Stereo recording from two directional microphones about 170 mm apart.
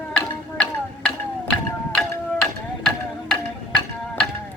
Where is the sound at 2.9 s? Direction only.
5° left (ahead or behind).